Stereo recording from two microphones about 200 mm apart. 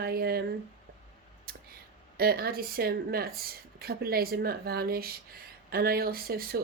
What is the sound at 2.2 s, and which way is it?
Speech, 50° right (ahead or behind).